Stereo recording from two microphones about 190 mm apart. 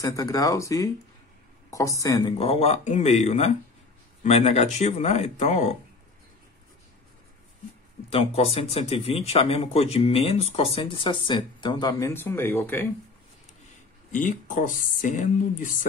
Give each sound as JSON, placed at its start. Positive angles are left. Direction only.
{"t": 0.0, "sound": "speech", "side_deg": 20}
{"t": 2.3, "sound": "speech", "side_deg": 30}
{"t": 8.1, "sound": "speech", "side_deg": 30}
{"t": 14.1, "sound": "speech", "side_deg": 45}